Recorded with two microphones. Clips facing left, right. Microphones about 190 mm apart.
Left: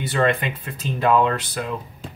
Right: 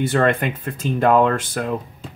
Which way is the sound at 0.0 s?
50° right (ahead or behind).